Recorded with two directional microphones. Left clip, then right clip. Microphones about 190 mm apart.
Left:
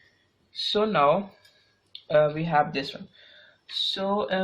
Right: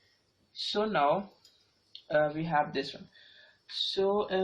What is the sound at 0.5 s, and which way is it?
Speech, 45° left (ahead or behind).